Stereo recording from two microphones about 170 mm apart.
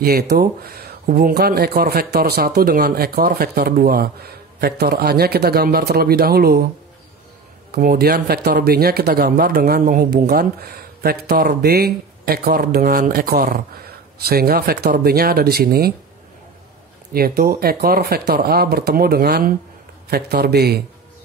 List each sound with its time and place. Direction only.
0.0 s speech: 65° right (ahead or behind)
7.7 s speech: 60° right (ahead or behind)
17.1 s a man's voice: 60° right (ahead or behind)